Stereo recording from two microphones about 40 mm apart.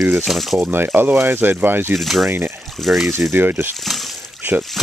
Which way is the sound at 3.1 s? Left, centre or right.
Right.